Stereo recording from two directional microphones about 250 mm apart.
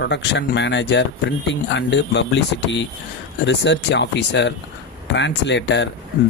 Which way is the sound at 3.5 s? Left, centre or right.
Left.